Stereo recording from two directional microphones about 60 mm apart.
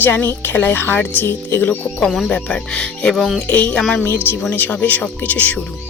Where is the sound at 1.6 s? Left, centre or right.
Left.